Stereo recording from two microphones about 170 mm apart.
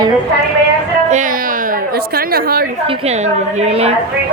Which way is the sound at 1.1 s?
50° right (ahead or behind).